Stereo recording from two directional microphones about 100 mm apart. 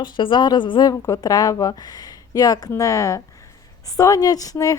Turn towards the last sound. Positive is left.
turn(degrees=35)  # may be behind; listen again after turning